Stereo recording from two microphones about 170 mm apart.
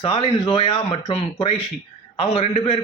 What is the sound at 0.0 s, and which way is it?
A man's voice, 35° left (ahead or behind).